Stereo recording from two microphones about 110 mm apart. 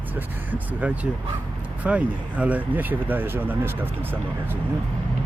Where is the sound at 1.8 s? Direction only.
10° right (ahead or behind).